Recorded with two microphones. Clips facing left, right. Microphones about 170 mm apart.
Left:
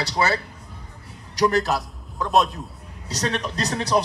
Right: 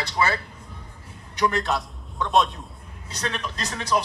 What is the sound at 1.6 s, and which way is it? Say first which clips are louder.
A man's voice: left 2 dB; centre (ahead or behind).